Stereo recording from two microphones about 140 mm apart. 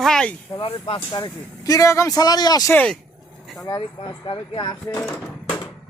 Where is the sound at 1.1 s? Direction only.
30° left (ahead or behind).